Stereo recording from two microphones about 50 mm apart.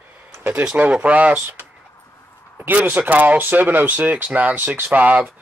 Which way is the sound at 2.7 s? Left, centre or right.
Right.